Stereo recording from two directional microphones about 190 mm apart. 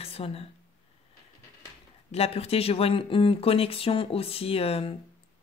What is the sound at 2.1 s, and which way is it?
Speech, 30° left (ahead or behind).